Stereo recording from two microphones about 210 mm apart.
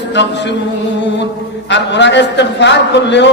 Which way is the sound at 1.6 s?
60° left (ahead or behind).